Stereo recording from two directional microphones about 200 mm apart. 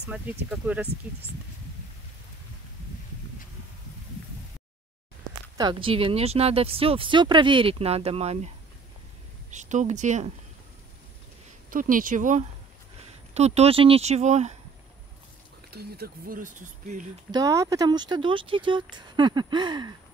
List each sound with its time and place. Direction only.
0.1 s speech: 5° right (ahead or behind)
5.6 s speech: 25° right (ahead or behind)
9.5 s speech: 35° right (ahead or behind)
11.7 s speech: 45° right (ahead or behind)
15.7 s speech: 50° right (ahead or behind)
17.3 s speech: 15° right (ahead or behind)